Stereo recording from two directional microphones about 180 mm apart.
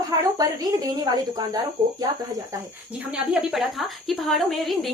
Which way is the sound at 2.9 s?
5° right (ahead or behind).